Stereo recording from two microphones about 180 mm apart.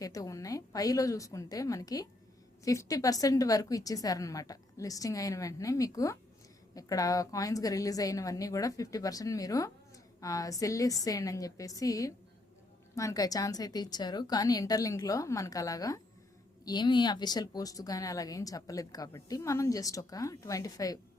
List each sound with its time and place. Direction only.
0.0 s speech: 20° left (ahead or behind)